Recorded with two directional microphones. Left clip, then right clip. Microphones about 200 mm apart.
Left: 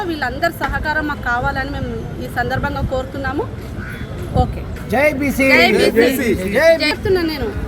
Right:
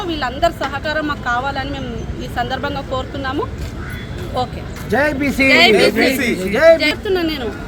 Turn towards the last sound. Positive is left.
turn(degrees=-5)  # may be behind; listen again after turning